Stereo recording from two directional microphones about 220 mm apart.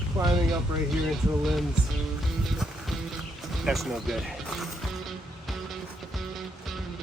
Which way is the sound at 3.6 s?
Centre (ahead or behind).